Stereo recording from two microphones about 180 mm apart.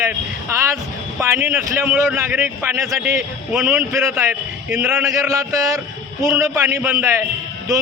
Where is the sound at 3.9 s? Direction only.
15° right (ahead or behind).